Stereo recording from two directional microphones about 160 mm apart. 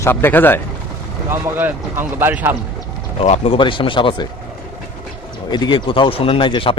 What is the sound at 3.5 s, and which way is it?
Speech, 30° left (ahead or behind).